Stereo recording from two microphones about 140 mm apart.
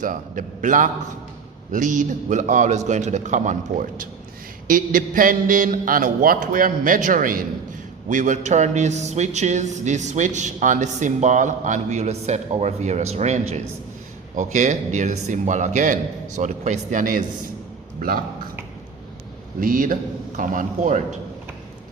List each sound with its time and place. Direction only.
0.0 s a man's voice: 70° right (ahead or behind)
8.1 s speech: 60° right (ahead or behind)
19.5 s a man's voice: 80° right; by 21.2 s 60° right (ahead or behind)